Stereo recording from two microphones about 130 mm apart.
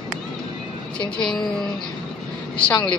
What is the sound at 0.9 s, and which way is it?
Speech, 5° left (ahead or behind).